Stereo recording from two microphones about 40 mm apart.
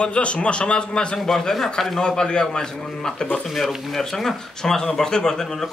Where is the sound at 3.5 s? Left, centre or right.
Centre.